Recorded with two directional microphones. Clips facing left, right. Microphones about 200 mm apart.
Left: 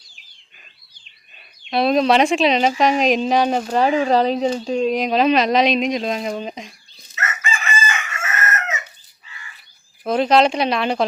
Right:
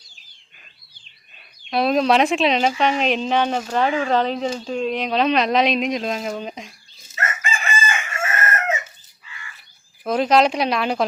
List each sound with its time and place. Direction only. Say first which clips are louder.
1.7 s a woman's voice: left 2 dB; centre (ahead or behind)
3.7 s speech: left 3 dB; 35° left (ahead or behind)
4.4 s a woman's voice: left 4 dB; 15° left (ahead or behind)
7.2 s chicken: even; 30° right (ahead or behind)
10.0 s a woman's voice: left 1 dB; centre (ahead or behind)